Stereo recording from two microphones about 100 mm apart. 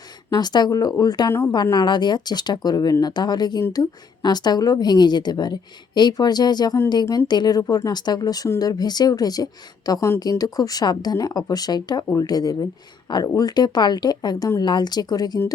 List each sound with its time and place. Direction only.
0.3 s a woman's voice: 45° left (ahead or behind)